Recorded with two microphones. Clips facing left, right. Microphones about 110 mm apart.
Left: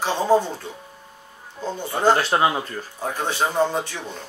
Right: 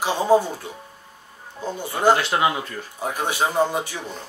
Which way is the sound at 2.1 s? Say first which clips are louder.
Left 1 dB; 35° left (ahead or behind).